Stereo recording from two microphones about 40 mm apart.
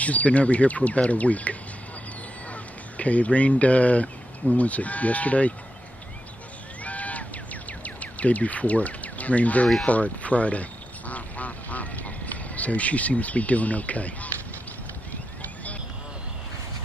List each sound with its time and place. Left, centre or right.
0.0 s speech: left
6.8 s a sound: left
7.8 s speech: left
9.8 s duck: left
12.5 s speech: left
15.4 s a sound: left